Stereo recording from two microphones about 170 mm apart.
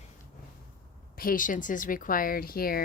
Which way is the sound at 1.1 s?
55° left (ahead or behind).